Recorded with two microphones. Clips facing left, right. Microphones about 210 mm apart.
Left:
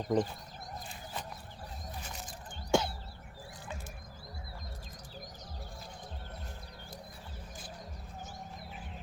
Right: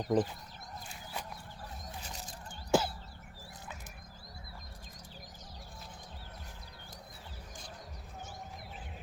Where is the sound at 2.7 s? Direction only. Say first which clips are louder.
Even; 5° right (ahead or behind).